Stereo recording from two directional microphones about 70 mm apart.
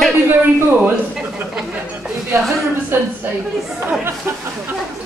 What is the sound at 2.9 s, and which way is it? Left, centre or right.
Speech, right.